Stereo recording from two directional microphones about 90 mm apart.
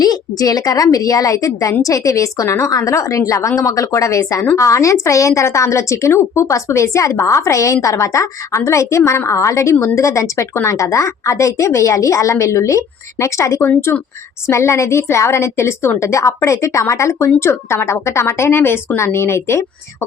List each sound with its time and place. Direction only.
0.0 s speech: 45° left (ahead or behind)
13.7 s speech: 25° left (ahead or behind)